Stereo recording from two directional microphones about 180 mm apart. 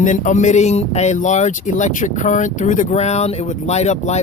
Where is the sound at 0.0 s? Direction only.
45° left (ahead or behind).